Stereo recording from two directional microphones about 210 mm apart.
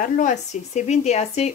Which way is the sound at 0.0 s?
35° left (ahead or behind).